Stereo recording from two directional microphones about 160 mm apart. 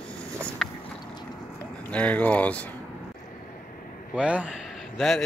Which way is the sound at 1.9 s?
10° left (ahead or behind).